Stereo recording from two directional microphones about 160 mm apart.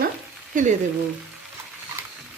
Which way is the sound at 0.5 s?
55° right (ahead or behind).